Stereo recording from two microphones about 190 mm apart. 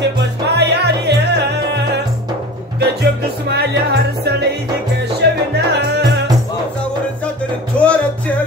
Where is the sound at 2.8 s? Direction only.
60° right (ahead or behind).